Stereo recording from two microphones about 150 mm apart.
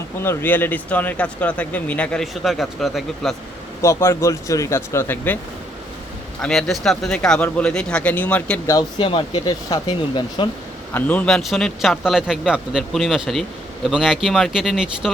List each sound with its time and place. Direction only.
0.2 s speech: 15° left (ahead or behind)
3.8 s speech: 20° left (ahead or behind)
6.4 s speech: centre (ahead or behind)
8.7 s speech: 35° left (ahead or behind)
10.9 s speech: 10° left (ahead or behind)